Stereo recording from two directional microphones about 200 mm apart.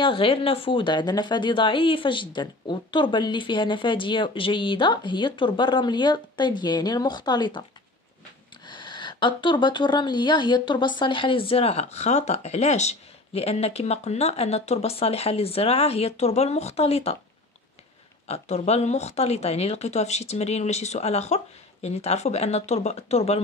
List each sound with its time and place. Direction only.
0.0 s speech: 25° left (ahead or behind)
8.6 s speech: 25° left (ahead or behind)
18.2 s speech: 30° left (ahead or behind)